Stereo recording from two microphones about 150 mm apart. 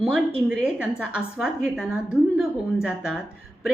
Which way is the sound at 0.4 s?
5° right (ahead or behind).